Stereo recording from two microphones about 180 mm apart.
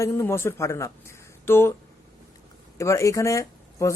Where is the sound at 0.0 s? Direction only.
15° left (ahead or behind).